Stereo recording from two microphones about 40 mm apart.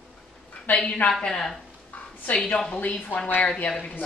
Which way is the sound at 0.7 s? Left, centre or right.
Left.